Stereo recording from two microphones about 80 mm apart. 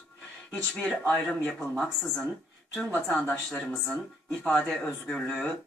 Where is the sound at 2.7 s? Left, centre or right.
Centre.